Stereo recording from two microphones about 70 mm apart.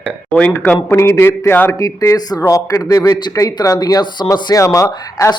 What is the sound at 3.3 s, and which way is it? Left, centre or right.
Speech, left.